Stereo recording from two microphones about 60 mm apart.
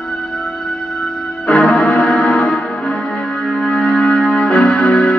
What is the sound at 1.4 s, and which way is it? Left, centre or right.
Music, centre.